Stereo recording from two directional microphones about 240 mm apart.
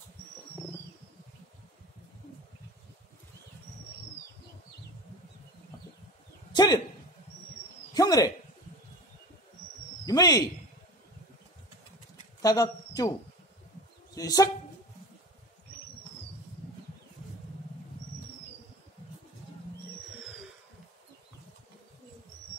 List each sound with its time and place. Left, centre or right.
6.5 s speech: centre
7.9 s a sound: centre
10.0 s speech: centre
12.4 s speech: centre
14.1 s speech: centre